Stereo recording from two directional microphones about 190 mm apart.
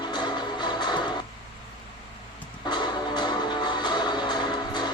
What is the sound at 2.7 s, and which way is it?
Music, 20° left (ahead or behind).